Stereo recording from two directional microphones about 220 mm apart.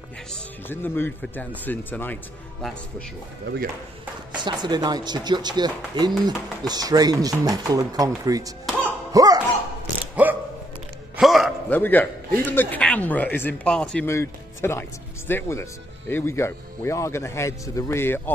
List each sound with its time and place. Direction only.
0.3 s speech: 10° left (ahead or behind)
4.4 s speech: 20° right (ahead or behind)
8.8 s music: 15° right (ahead or behind)
10.2 s a sound: 5° right (ahead or behind)
11.8 s speech: 10° left (ahead or behind)